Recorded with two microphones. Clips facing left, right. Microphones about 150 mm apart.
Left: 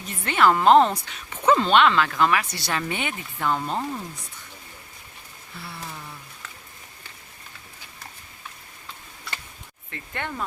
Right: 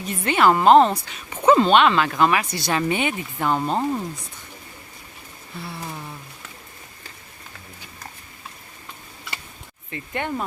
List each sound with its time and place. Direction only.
0.3 s speech: 15° right (ahead or behind)
0.6 s speech: centre (ahead or behind)
1.3 s speech: 15° right (ahead or behind)
9.9 s speech: 15° right (ahead or behind)